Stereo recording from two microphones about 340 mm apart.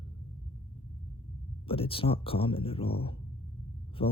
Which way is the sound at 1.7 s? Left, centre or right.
Centre.